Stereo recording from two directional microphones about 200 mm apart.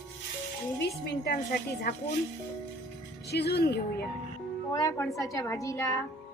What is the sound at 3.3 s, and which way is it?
Speech, 55° left (ahead or behind).